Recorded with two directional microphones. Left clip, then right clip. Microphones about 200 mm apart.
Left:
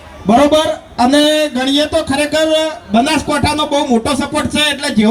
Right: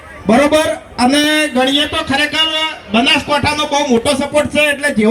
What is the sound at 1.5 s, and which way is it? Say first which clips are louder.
Speech: even; 50° left (ahead or behind).